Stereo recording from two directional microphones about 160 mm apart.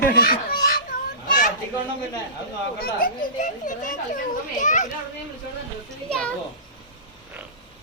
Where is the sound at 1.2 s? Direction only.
55° left (ahead or behind).